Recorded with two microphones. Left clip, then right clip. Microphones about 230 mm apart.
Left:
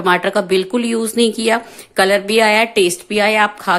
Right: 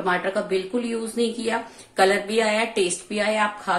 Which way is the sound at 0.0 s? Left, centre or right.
Left.